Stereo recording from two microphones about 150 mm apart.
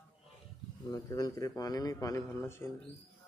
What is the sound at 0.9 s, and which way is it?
A man's voice, 25° left (ahead or behind).